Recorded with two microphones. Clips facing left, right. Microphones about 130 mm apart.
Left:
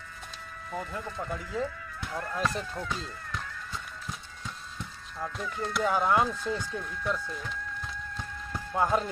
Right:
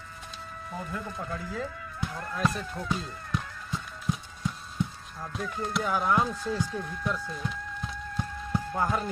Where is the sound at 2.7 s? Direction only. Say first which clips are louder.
Right 2 dB; 25° right (ahead or behind).